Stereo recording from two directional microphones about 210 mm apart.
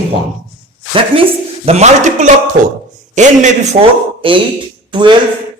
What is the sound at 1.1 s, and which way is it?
A woman's voice, 25° right (ahead or behind).